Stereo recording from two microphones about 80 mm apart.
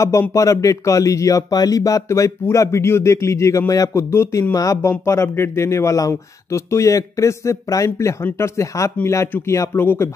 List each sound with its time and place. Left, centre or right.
0.3 s speech: left